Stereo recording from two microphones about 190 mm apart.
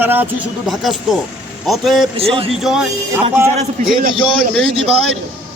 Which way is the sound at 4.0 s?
50° right (ahead or behind).